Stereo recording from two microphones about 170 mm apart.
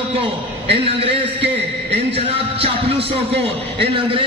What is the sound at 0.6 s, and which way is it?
Speech, 35° right (ahead or behind).